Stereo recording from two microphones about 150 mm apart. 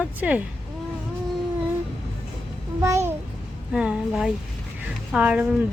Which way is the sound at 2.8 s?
20° right (ahead or behind).